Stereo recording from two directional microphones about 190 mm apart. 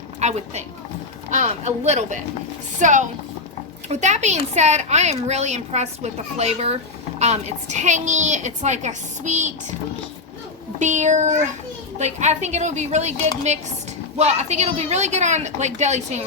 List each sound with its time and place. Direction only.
0.2 s a woman's voice: 35° right (ahead or behind)
10.8 s a woman's voice: 40° right (ahead or behind)